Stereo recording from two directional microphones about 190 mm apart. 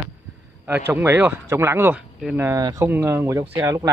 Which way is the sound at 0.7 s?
10° right (ahead or behind).